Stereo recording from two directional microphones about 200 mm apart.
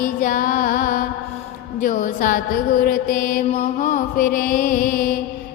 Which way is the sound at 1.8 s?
40° left (ahead or behind).